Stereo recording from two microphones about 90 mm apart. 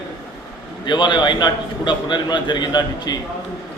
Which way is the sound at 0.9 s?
60° left (ahead or behind).